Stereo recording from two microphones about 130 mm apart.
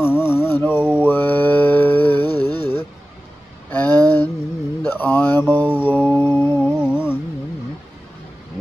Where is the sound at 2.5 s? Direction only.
15° left (ahead or behind).